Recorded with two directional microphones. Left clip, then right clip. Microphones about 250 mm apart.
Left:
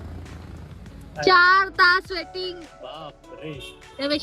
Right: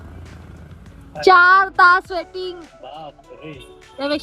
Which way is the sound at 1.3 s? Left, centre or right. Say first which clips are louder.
Right 5 dB; centre.